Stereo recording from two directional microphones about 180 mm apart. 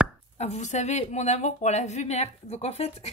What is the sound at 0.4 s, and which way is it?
A woman's voice, 40° left (ahead or behind).